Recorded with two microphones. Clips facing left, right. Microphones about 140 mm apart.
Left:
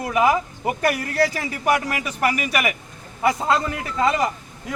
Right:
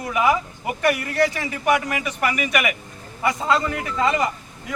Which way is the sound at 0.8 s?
35° left (ahead or behind).